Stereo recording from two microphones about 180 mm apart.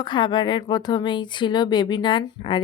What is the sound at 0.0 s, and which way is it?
A woman's voice, 25° left (ahead or behind).